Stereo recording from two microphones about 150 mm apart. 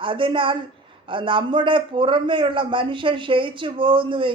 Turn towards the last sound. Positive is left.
turn(degrees=-35)  # may be behind; listen again after turning